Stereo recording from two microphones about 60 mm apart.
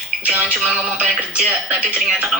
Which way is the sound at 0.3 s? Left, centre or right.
Right.